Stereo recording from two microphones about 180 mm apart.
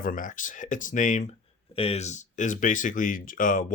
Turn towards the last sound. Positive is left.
turn(degrees=50)  # may be behind; listen again after turning